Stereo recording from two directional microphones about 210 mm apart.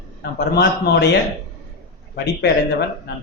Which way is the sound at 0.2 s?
50° left (ahead or behind).